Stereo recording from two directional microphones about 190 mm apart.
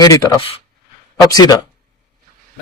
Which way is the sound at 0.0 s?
25° left (ahead or behind).